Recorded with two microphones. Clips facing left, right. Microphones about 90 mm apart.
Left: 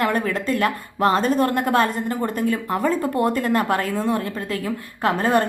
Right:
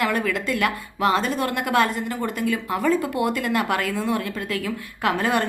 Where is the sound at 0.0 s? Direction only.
35° left (ahead or behind).